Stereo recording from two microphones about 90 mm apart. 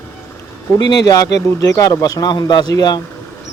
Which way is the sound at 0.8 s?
45° left (ahead or behind).